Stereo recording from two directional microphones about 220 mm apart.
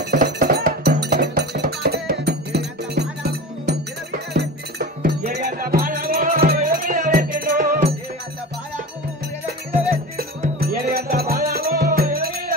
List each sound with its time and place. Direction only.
0.0 s music: 45° right (ahead or behind)
10.1 s music: 45° right (ahead or behind)